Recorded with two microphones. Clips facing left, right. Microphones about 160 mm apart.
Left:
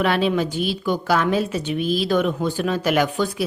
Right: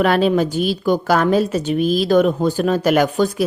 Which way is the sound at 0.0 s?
45° right (ahead or behind).